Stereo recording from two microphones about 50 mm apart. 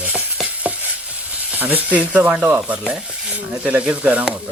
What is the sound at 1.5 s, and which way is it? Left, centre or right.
Speech, right.